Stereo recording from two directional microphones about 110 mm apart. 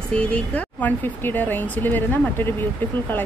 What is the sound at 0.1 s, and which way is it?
Speech, 10° left (ahead or behind).